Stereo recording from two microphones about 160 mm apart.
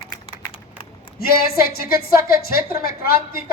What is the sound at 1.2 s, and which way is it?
A woman's voice, 70° left (ahead or behind).